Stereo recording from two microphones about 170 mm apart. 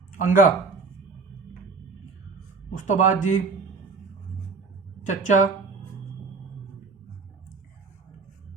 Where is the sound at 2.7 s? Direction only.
45° left (ahead or behind).